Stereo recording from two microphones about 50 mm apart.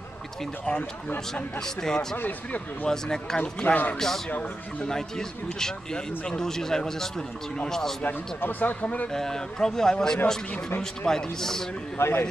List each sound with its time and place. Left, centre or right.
1.3 s speech: centre
2.1 s speech: left
2.9 s speech: centre
3.3 s speech: left
4.8 s speech: centre
8.0 s speech: left
9.1 s speech: centre
12.0 s a man's voice: left